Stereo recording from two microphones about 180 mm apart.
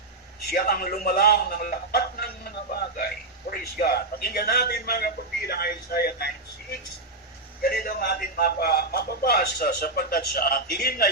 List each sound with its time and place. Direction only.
0.4 s a man's voice: 55° left (ahead or behind)